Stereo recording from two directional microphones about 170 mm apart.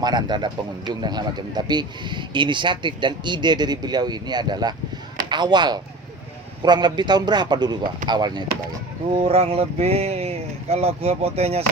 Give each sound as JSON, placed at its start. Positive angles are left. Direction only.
{"t": 0.0, "sound": "speech", "side_deg": -25}